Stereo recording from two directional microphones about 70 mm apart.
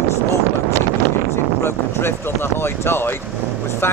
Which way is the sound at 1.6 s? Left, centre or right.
Left.